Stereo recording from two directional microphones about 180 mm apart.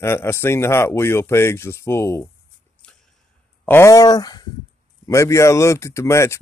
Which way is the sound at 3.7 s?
15° left (ahead or behind).